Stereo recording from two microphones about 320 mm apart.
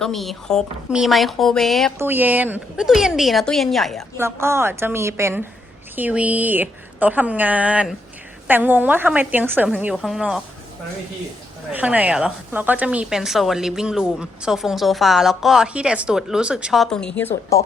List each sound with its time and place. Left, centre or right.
0.0 s a woman's voice: centre
11.7 s a woman's voice: centre